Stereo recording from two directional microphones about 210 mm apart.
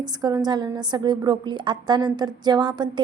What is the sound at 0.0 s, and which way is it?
A woman's voice, 20° right (ahead or behind).